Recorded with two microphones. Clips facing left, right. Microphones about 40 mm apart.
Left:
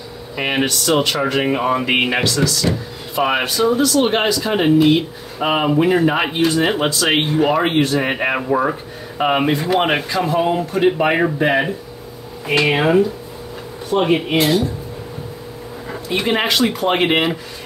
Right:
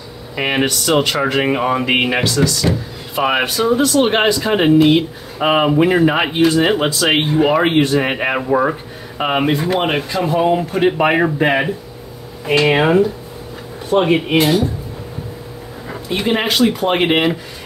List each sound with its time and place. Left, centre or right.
0.4 s speech: centre
10.0 s speech: centre
10.7 s speech: centre
11.3 s speech: right
14.0 s speech: centre
15.9 s speech: centre